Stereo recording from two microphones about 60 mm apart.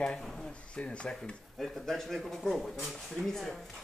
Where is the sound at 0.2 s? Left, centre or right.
Centre.